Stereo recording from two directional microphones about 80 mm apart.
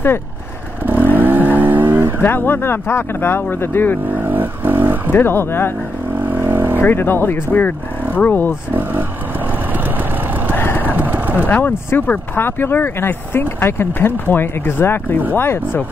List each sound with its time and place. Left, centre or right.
0.8 s vehicle: right
2.2 s speech: left
4.2 s vehicle: right
5.1 s speech: left
6.2 s vehicle: right
6.8 s speech: left
10.5 s vehicle: left
11.0 s a sound: right
11.4 s speech: centre